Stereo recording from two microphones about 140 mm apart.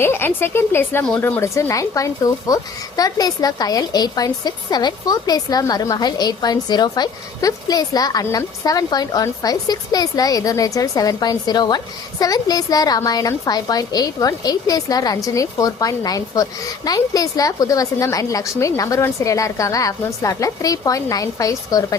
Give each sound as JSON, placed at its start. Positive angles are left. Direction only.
{"t": 0.0, "sound": "speech", "side_deg": 15}